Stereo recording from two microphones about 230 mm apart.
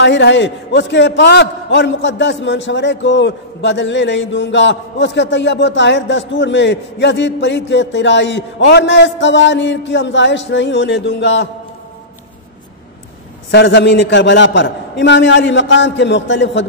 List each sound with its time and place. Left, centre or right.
0.0 s a man's voice: left
13.5 s a man's voice: left